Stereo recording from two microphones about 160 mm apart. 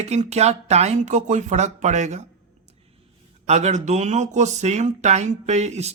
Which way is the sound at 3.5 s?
45° right (ahead or behind).